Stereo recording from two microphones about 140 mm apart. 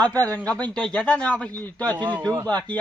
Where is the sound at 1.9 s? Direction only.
35° right (ahead or behind).